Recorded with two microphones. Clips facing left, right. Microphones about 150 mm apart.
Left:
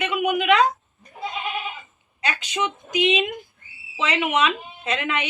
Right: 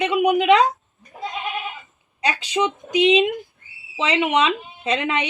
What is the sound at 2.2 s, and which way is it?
A woman's voice, 35° right (ahead or behind).